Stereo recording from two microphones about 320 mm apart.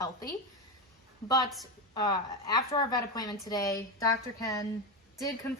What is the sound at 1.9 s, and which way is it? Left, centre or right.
A woman's voice, centre.